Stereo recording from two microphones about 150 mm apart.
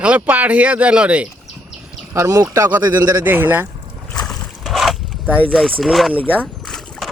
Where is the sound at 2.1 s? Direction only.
20° right (ahead or behind).